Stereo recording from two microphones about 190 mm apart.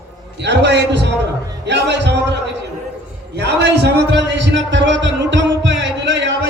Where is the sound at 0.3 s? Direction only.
65° right (ahead or behind).